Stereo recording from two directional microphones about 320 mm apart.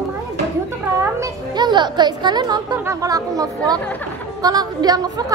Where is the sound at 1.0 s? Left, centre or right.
Centre.